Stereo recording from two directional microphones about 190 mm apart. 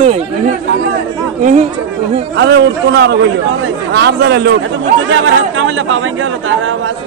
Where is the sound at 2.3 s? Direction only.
70° right (ahead or behind).